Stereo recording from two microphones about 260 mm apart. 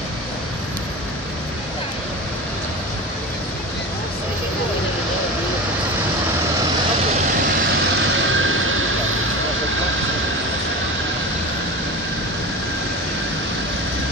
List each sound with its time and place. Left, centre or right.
7.9 s vehicle: right